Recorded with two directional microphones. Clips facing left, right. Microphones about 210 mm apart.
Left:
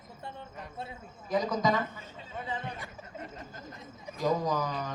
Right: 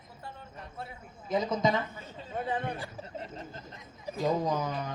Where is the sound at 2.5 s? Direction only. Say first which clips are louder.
Right 4 dB; 55° right (ahead or behind).